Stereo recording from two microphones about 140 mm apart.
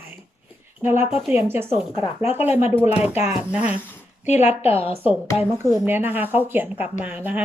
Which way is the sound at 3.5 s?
10° right (ahead or behind).